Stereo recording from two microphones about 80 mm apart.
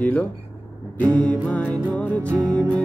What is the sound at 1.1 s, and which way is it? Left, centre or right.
Music, centre.